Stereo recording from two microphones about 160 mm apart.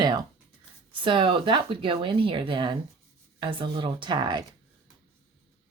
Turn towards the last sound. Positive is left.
turn(degrees=-30)  # may be behind; listen again after turning